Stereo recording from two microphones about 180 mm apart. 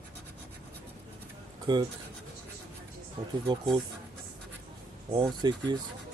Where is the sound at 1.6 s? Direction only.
20° right (ahead or behind).